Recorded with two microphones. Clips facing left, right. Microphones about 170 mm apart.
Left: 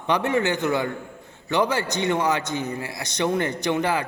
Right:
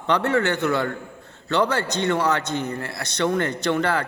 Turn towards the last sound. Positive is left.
turn(degrees=15)  # may be behind; listen again after turning